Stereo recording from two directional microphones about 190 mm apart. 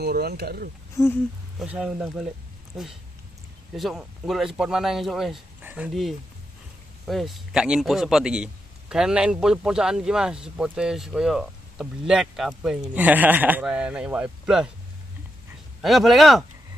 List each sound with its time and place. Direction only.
0.0 s speech: 55° right (ahead or behind)
1.0 s speech: 15° left (ahead or behind)
1.6 s a man's voice: 5° right (ahead or behind)
15.8 s a man's voice: centre (ahead or behind)